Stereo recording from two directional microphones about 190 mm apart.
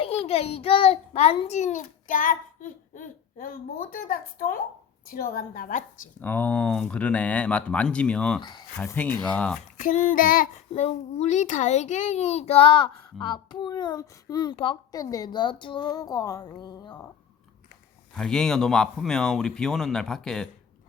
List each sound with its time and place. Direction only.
0.0 s a child's voice: 30° left (ahead or behind)
6.2 s speech: 10° left (ahead or behind)
8.4 s speech: 25° left (ahead or behind)
8.8 s speech: 10° left (ahead or behind)
9.7 s a child's voice: 40° left (ahead or behind); by 17.0 s 20° left (ahead or behind)
18.1 s speech: 5° left (ahead or behind)